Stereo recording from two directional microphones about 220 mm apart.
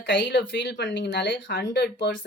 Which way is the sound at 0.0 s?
55° left (ahead or behind).